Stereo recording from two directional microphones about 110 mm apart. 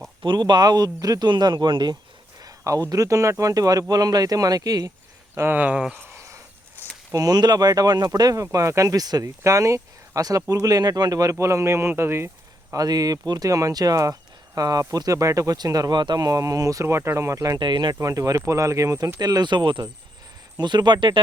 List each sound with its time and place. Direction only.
0.2 s speech: 45° right (ahead or behind)
2.4 s speech: 30° right (ahead or behind)
5.3 s speech: 20° right (ahead or behind)
7.1 s speech: 35° right (ahead or behind)
12.7 s speech: 35° right (ahead or behind)
18.0 s speech: 30° right (ahead or behind)